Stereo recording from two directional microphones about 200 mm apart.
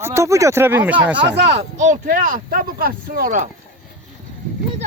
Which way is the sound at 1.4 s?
35° right (ahead or behind).